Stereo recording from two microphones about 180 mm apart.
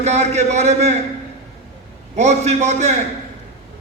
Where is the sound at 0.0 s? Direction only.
40° right (ahead or behind).